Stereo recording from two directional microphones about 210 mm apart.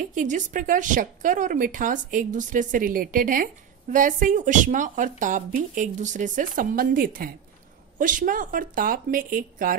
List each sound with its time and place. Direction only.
0.1 s speech: 35° right (ahead or behind)